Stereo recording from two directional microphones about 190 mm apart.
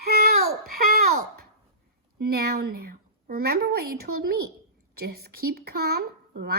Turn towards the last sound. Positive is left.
turn(degrees=-60)  # may be behind; listen again after turning